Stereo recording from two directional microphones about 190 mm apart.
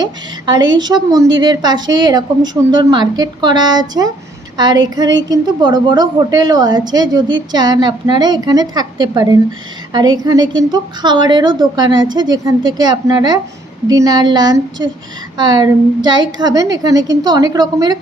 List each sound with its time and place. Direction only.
0.0 s a woman's voice: 20° right (ahead or behind)